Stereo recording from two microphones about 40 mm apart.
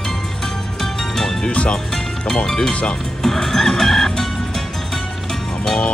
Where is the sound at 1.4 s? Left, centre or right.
Left.